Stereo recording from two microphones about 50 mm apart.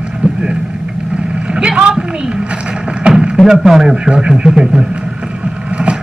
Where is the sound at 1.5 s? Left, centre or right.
Centre.